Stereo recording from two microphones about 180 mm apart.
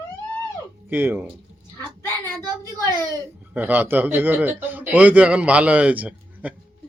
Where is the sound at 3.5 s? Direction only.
10° right (ahead or behind).